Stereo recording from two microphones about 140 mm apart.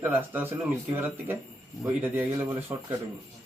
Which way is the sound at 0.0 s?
15° right (ahead or behind).